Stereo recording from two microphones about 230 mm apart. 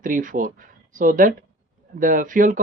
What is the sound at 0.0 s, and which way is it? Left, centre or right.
Speech, right.